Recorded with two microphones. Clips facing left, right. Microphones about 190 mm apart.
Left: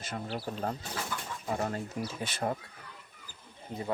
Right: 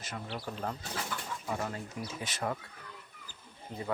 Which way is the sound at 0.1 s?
35° left (ahead or behind).